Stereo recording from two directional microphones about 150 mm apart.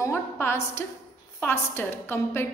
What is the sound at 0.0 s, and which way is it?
A woman's voice, 15° left (ahead or behind).